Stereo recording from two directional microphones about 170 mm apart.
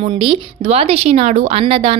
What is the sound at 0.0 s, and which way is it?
Speech, 30° right (ahead or behind).